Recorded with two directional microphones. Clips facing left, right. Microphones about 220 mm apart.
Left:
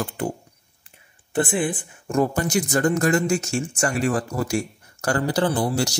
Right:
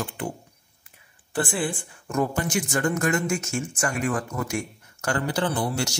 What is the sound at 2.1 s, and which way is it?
Speech, 35° left (ahead or behind).